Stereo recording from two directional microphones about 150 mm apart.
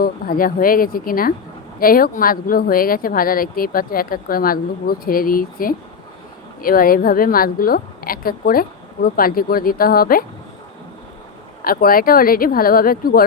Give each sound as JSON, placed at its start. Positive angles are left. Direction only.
{"t": 0.0, "sound": "speech", "side_deg": 75}
{"t": 11.6, "sound": "speech", "side_deg": 75}